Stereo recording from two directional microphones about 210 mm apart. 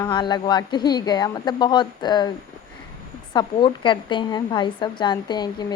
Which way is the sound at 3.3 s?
20° left (ahead or behind).